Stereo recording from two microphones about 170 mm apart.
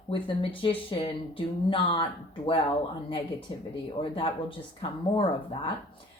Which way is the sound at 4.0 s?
30° left (ahead or behind).